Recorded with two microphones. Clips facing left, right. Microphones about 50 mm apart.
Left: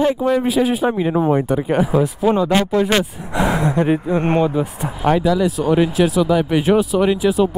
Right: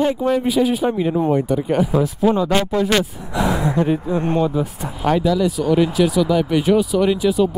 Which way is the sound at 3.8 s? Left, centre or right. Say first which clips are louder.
Left 2 dB; left.